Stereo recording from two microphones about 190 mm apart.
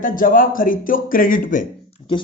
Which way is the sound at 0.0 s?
45° left (ahead or behind).